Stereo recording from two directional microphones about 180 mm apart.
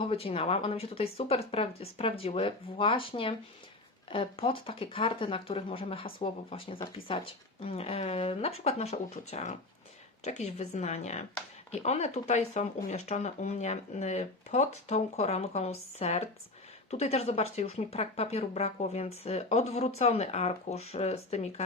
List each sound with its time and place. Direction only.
0.0 s speech: 30° left (ahead or behind)
7.6 s speech: 35° left (ahead or behind)